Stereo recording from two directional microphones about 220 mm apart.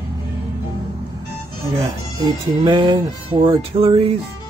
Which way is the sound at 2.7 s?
20° right (ahead or behind).